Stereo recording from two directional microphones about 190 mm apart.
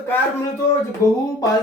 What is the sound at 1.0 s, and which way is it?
Speech, 15° left (ahead or behind).